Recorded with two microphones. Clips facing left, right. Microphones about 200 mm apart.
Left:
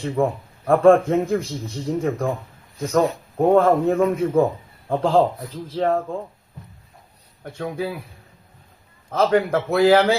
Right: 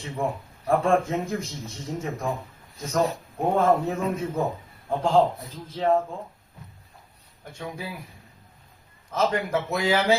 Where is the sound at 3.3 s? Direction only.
60° left (ahead or behind).